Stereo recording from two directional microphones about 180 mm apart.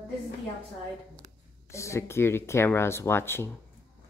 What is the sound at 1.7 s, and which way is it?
Speech, 15° left (ahead or behind).